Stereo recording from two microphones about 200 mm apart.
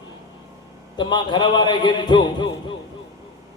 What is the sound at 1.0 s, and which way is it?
A man's voice, 20° left (ahead or behind).